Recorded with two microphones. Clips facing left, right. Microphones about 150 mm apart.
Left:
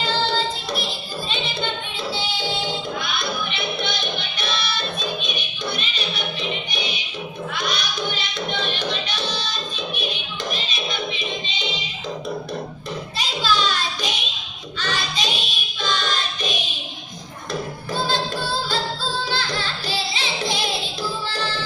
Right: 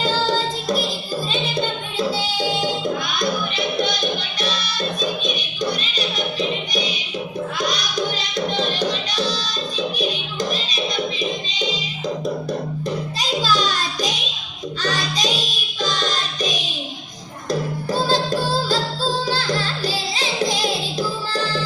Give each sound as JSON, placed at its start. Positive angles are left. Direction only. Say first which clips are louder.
{"t": 0.0, "sound": "music", "louder": "right 3 dB", "side_deg": -40}
{"t": 7.6, "sound": "music", "louder": "right 3 dB", "side_deg": -40}
{"t": 13.1, "sound": "music", "louder": "even", "side_deg": -40}